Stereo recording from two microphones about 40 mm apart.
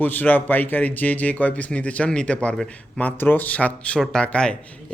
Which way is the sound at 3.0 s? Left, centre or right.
Left.